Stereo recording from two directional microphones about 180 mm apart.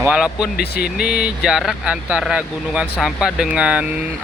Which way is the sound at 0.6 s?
60° left (ahead or behind).